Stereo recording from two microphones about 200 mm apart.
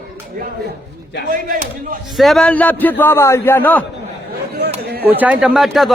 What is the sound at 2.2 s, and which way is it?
A man's voice, centre (ahead or behind).